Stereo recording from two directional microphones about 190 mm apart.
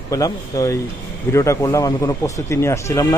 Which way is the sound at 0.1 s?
15° left (ahead or behind).